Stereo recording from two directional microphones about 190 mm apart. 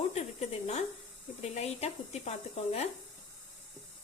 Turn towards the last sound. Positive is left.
turn(degrees=35)  # may be behind; listen again after turning